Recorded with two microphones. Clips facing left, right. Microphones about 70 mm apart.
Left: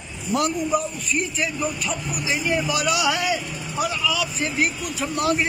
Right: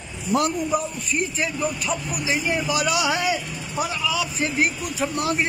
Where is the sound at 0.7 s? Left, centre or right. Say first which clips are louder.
Left 1 dB; right.